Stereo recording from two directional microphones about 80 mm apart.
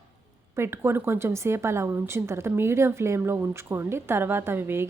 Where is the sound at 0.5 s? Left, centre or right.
Right.